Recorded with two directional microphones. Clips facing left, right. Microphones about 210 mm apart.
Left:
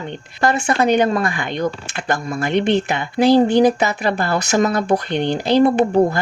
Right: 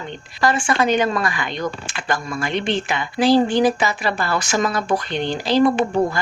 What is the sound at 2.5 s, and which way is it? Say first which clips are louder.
Speech: left 6 dB; 55° left (ahead or behind).